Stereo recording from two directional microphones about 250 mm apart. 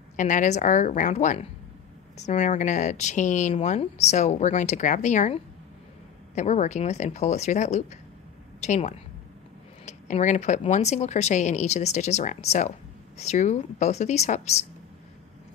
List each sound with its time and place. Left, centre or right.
0.1 s speech: left